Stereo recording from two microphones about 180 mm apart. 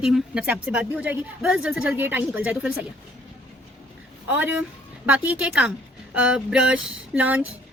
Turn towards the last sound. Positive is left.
turn(degrees=-10)  # may be behind; listen again after turning